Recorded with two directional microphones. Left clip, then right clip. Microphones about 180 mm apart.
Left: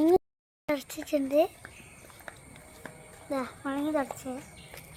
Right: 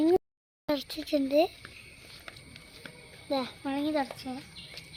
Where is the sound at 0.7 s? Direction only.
20° left (ahead or behind).